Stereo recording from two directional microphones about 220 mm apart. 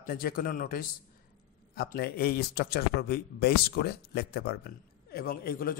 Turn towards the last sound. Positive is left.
turn(degrees=40)  # may be behind; listen again after turning